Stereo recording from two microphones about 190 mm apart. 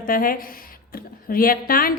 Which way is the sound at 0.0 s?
50° left (ahead or behind).